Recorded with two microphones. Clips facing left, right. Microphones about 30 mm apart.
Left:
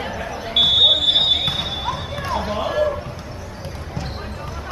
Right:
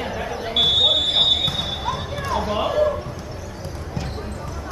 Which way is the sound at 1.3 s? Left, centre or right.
Left.